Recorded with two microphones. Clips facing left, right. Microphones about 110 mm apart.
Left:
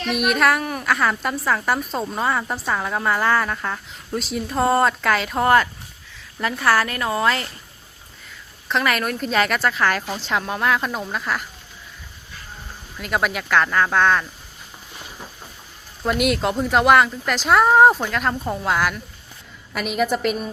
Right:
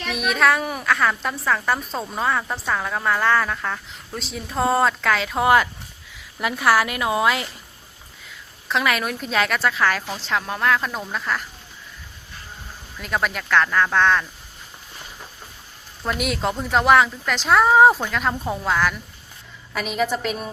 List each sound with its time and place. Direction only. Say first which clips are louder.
0.2 s a woman's voice: even; 5° left (ahead or behind)
0.9 s a woman's voice: even; 5° left (ahead or behind)
8.7 s a woman's voice: left 1 dB; centre (ahead or behind)
13.0 s a woman's voice: left 2 dB; 5° left (ahead or behind)
16.0 s a woman's voice: left 4 dB; centre (ahead or behind)
18.6 s a woman's voice: even; 10° left (ahead or behind)